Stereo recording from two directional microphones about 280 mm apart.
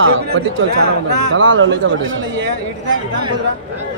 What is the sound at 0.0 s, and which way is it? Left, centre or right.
Speech, right.